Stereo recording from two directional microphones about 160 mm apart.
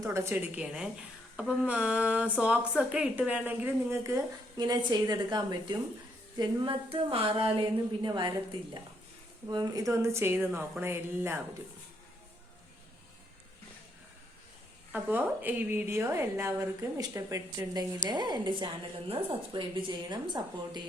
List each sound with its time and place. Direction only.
0.0 s a woman's voice: 15° right (ahead or behind)
9.5 s a woman's voice: 25° right (ahead or behind)
14.9 s a woman's voice: 10° right (ahead or behind); by 20.8 s 30° right (ahead or behind)